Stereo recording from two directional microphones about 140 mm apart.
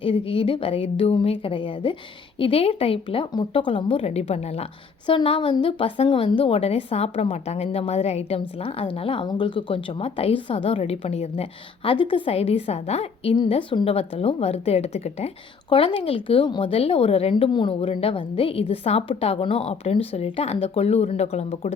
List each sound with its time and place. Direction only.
0.0 s a woman's voice: 40° left (ahead or behind)
5.0 s a woman's voice: 40° left (ahead or behind)
15.7 s a woman's voice: 40° left (ahead or behind)